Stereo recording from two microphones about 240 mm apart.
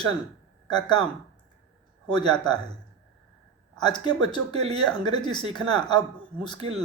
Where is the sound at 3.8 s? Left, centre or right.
Centre.